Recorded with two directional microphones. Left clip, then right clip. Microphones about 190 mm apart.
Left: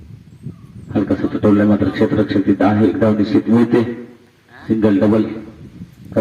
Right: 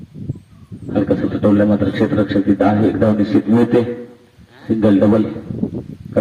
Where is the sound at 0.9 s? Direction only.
45° right (ahead or behind).